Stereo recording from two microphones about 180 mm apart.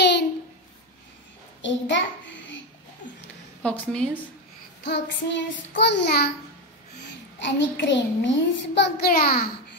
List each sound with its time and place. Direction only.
1.6 s a child's voice: 90° left
3.6 s a woman's voice: 5° left (ahead or behind)
4.8 s child singing: 70° left (ahead or behind)
7.3 s a child's voice: 80° left
9.1 s a child's voice: 60° left (ahead or behind)